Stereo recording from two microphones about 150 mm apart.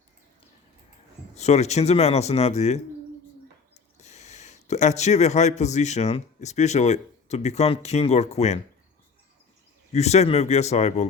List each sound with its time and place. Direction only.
1.4 s speech: 45° left (ahead or behind)
3.9 s speech: 50° left (ahead or behind)
9.9 s speech: 45° left (ahead or behind)